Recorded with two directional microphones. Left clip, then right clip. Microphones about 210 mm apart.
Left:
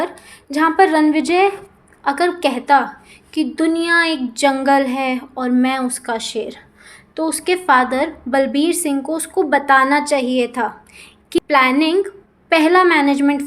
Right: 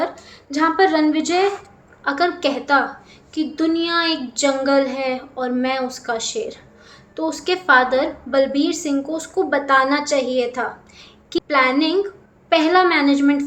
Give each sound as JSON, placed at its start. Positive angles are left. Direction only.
{"t": 0.5, "sound": "a woman's voice", "side_deg": 35}